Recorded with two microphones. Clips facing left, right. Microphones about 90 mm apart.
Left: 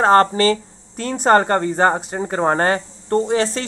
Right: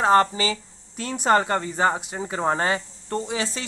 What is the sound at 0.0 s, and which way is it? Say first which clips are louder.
Speech: left 5 dB; 50° left (ahead or behind).